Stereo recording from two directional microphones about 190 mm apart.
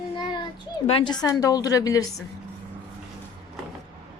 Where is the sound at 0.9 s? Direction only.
25° left (ahead or behind).